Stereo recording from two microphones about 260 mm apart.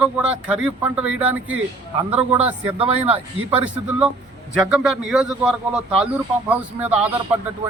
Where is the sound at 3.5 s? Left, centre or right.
Centre.